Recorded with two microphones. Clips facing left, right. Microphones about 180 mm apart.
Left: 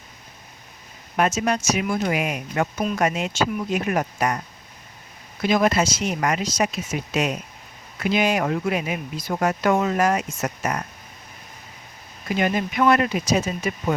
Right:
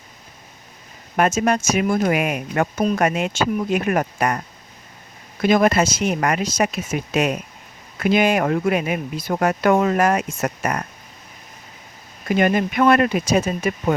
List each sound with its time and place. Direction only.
1.1 s speech: 50° right (ahead or behind)
5.4 s speech: 55° right (ahead or behind)
12.4 s speech: 55° right (ahead or behind)